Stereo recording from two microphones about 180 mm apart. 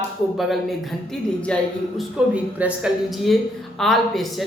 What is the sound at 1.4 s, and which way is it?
A woman's voice, 5° left (ahead or behind).